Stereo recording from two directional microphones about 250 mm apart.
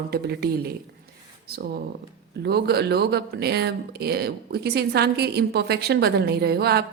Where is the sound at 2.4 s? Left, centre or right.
Right.